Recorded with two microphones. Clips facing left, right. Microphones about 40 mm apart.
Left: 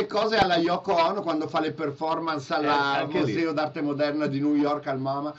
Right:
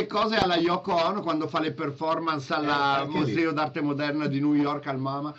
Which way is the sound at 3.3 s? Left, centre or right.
Right.